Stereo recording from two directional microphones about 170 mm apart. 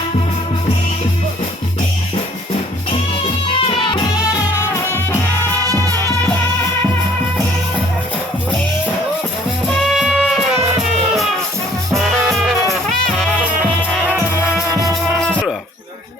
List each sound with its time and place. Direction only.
3.5 s music: 30° left (ahead or behind); by 5.8 s 15° left (ahead or behind)
9.6 s music: 5° right (ahead or behind)
14.1 s music: 5° right (ahead or behind)